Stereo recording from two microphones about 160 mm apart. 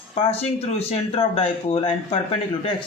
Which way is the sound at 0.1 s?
40° left (ahead or behind).